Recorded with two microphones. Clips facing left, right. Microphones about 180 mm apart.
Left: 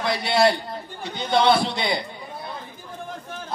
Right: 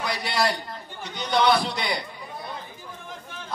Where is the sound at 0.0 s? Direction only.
25° left (ahead or behind).